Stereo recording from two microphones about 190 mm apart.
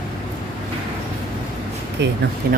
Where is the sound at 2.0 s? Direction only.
65° right (ahead or behind).